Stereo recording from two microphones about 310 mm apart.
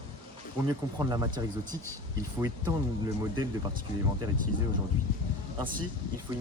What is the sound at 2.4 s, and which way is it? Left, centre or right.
Speech, centre.